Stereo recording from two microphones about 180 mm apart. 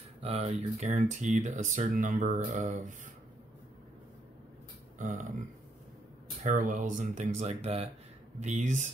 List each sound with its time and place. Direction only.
0.2 s speech: 35° right (ahead or behind)
4.9 s a sound: 45° right (ahead or behind)
6.4 s speech: 45° right (ahead or behind)